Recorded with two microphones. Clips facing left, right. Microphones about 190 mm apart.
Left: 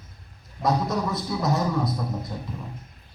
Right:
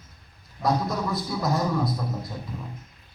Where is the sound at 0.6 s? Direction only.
Centre (ahead or behind).